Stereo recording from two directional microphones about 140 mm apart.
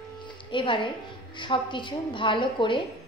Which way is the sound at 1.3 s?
35° left (ahead or behind).